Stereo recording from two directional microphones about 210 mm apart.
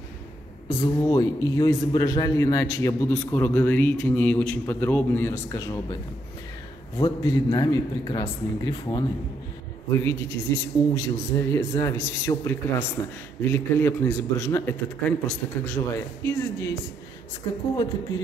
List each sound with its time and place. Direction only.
0.7 s a man's voice: 15° left (ahead or behind)
7.0 s a man's voice: 20° left (ahead or behind)